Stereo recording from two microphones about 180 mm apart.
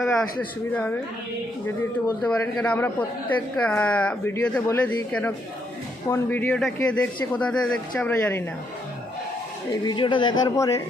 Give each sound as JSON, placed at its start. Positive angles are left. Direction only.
{"t": 0.0, "sound": "speech", "side_deg": 5}
{"t": 9.8, "sound": "speech", "side_deg": 25}